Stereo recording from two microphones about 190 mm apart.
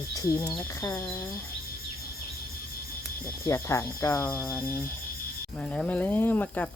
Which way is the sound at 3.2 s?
15° left (ahead or behind).